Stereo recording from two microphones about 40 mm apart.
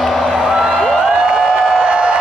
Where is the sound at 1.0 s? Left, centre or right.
Centre.